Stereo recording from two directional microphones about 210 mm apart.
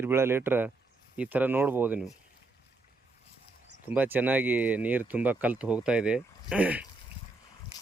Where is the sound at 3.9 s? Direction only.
10° right (ahead or behind).